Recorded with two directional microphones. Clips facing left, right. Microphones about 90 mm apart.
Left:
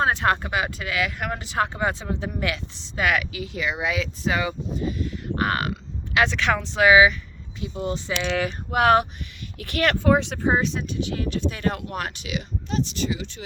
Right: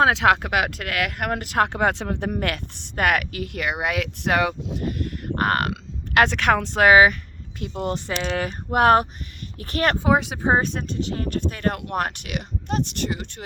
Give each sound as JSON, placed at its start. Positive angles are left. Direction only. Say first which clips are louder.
{"t": 0.0, "sound": "speech", "louder": "right 4 dB", "side_deg": -90}
{"t": 10.0, "sound": "speech", "louder": "even", "side_deg": -5}
{"t": 10.5, "sound": "speech", "louder": "right 4 dB", "side_deg": -50}